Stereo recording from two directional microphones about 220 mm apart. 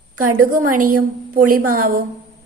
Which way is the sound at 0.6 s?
40° right (ahead or behind).